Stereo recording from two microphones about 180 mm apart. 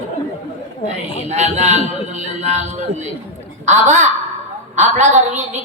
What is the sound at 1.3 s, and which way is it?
A woman's voice, 40° right (ahead or behind).